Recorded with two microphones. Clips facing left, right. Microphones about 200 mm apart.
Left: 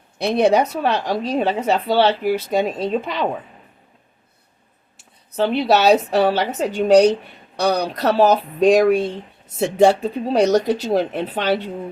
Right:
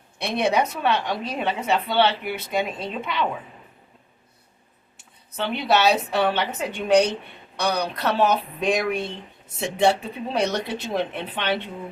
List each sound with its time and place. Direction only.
0.2 s a woman's voice: 40° left (ahead or behind)
5.4 s a woman's voice: 35° left (ahead or behind)